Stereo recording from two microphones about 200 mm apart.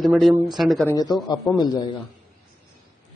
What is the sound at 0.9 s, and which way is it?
A man's voice, 20° left (ahead or behind).